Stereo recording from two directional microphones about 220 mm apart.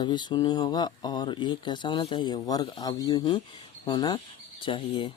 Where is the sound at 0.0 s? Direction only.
20° left (ahead or behind).